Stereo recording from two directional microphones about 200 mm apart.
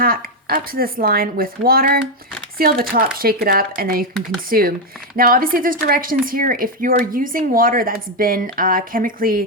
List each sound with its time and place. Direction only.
0.0 s a woman's voice: 45° right (ahead or behind)